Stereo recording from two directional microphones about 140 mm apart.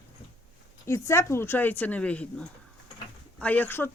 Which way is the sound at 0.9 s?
20° left (ahead or behind).